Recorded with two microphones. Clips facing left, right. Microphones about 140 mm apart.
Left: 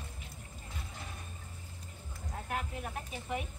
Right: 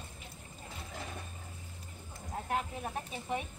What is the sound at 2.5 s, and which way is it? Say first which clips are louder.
Speech: right 3 dB; 30° right (ahead or behind).